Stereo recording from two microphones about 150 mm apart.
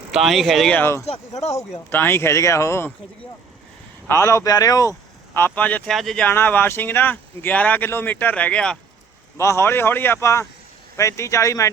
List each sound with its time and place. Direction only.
0.1 s speech: centre (ahead or behind)
0.8 s speech: 15° left (ahead or behind)
1.0 s speech: 45° left (ahead or behind)
1.9 s speech: 15° left (ahead or behind)
4.1 s speech: 20° left (ahead or behind); by 6.2 s centre (ahead or behind)
6.2 s speech: 15° left (ahead or behind)
9.4 s speech: 20° left (ahead or behind)